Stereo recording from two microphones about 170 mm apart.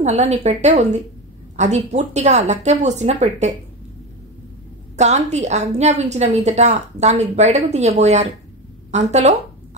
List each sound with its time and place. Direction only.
0.0 s a woman's voice: 40° right (ahead or behind)
4.9 s a woman's voice: 40° right (ahead or behind)